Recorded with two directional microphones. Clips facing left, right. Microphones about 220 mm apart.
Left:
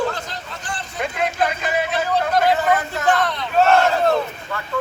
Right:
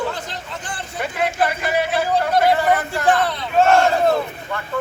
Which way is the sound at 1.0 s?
5° right (ahead or behind).